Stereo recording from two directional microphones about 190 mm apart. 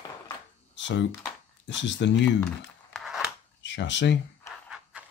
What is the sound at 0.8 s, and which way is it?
Speech, 70° left (ahead or behind).